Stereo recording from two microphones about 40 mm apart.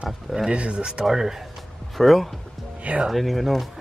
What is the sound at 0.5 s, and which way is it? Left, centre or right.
Speech, right.